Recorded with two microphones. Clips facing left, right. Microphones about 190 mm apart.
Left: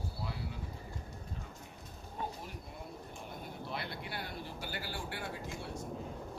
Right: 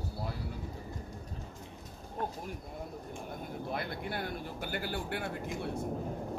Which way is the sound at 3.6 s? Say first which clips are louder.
Right 5 dB; 50° right (ahead or behind).